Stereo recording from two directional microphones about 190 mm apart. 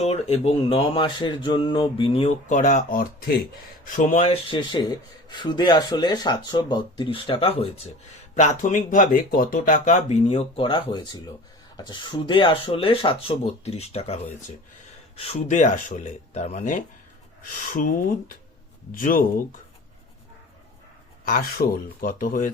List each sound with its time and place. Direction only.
0.0 s speech: 35° left (ahead or behind)
8.4 s speech: 40° left (ahead or behind)
21.2 s speech: 50° left (ahead or behind)